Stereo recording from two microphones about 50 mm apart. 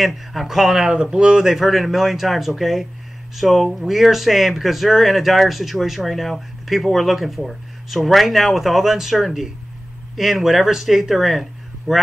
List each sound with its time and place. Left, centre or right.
0.0 s speech: centre
1.1 s speech: centre
1.5 s speech: centre